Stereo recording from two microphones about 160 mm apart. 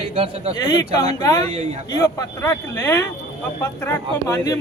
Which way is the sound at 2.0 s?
20° left (ahead or behind).